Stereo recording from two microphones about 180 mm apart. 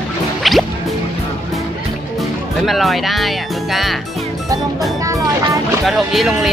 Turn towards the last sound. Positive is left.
turn(degrees=0)  # may be behind; listen again after turning